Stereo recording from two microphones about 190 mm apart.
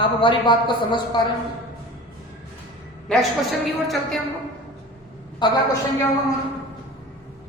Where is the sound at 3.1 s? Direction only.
Centre (ahead or behind).